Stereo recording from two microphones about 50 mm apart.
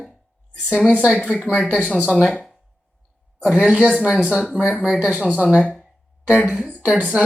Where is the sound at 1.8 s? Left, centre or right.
Right.